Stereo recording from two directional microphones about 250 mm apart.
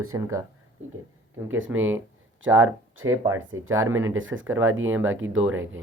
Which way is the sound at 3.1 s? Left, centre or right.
Centre.